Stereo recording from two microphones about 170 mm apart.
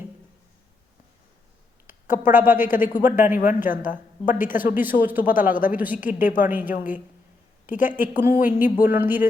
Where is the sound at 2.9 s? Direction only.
50° left (ahead or behind).